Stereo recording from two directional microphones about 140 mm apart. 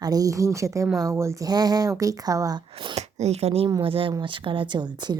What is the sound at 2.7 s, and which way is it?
A woman's voice, 45° right (ahead or behind).